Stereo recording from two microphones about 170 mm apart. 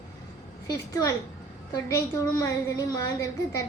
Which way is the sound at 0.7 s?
20° left (ahead or behind).